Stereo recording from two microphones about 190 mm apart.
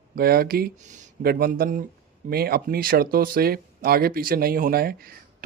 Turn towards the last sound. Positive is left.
turn(degrees=-55)  # may be behind; listen again after turning